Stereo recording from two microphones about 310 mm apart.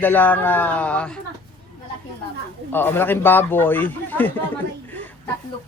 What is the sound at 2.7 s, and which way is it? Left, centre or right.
Speech, centre.